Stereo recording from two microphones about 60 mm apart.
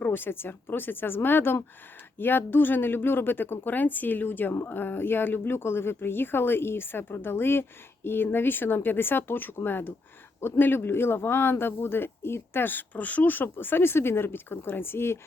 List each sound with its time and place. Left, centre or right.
0.0 s speech: left